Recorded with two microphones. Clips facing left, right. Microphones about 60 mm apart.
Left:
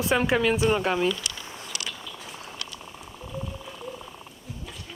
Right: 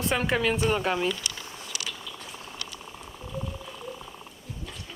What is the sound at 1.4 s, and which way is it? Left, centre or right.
Chewing, left.